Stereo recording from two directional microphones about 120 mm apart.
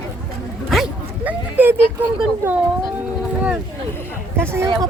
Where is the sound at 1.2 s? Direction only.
15° right (ahead or behind).